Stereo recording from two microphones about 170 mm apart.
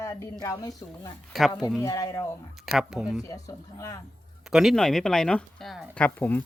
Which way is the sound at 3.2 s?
20° left (ahead or behind).